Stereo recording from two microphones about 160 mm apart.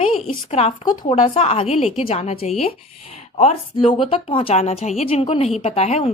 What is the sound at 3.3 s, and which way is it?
A woman's voice, 35° left (ahead or behind).